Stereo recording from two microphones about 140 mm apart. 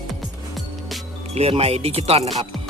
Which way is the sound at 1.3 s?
45° right (ahead or behind).